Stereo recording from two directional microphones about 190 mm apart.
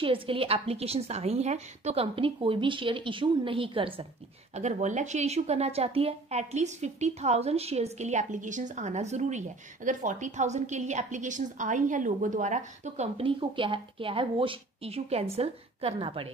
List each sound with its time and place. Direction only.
0.0 s a woman's voice: 30° right (ahead or behind)
4.6 s a woman's voice: 40° right (ahead or behind)